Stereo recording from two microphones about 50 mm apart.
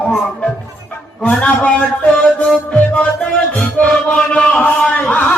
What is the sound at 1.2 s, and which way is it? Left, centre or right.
A man's voice, left.